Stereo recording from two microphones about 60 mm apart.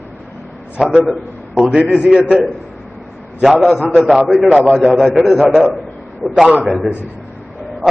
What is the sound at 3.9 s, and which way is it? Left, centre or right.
A man's voice, centre.